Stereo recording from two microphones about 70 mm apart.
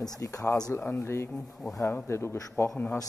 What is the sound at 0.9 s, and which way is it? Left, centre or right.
Speech, left.